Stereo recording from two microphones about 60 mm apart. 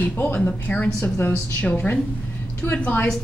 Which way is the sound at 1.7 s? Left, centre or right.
Left.